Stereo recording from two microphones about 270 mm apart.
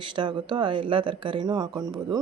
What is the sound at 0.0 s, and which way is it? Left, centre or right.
Speech, centre.